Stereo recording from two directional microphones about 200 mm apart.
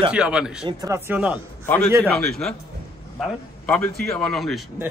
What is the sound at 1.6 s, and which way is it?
A man's voice, 10° left (ahead or behind).